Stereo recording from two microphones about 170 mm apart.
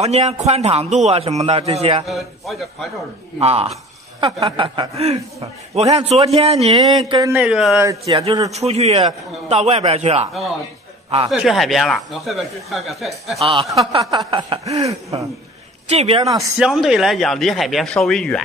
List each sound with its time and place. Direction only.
0.0 s a man's voice: 40° right (ahead or behind)
2.0 s speech: centre (ahead or behind)
3.3 s a man's voice: 35° right (ahead or behind)
6.8 s speech: 25° right (ahead or behind)
7.3 s speech: 5° right (ahead or behind)
8.0 s a man's voice: 30° right (ahead or behind)
11.2 s speech: centre (ahead or behind)
13.9 s a man's voice: 30° right (ahead or behind)
14.8 s speech: 20° right (ahead or behind)
15.9 s a man's voice: 40° right (ahead or behind)
16.2 s speech: 20° right (ahead or behind)
16.5 s speech: centre (ahead or behind)